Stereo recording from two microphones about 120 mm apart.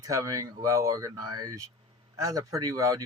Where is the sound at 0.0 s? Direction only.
30° right (ahead or behind).